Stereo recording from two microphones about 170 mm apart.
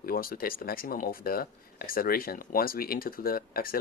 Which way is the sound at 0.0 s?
60° left (ahead or behind).